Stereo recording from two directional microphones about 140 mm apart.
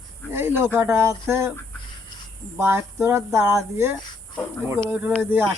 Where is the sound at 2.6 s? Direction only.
15° right (ahead or behind).